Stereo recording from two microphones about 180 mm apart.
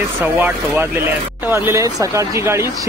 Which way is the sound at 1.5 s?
15° right (ahead or behind).